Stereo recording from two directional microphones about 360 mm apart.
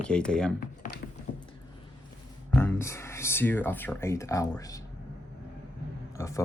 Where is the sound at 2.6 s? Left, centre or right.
Centre.